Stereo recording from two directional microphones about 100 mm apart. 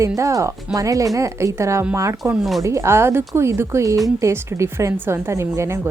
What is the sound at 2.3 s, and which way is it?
Speech, centre (ahead or behind).